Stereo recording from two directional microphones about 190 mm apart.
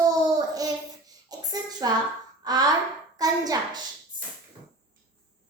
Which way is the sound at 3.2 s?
20° right (ahead or behind).